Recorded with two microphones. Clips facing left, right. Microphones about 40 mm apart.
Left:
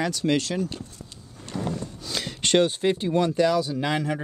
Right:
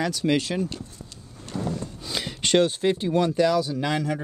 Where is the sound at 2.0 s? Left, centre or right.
Centre.